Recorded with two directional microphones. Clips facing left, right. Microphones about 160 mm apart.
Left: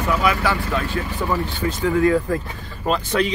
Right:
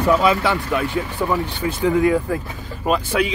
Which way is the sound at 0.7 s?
15° right (ahead or behind).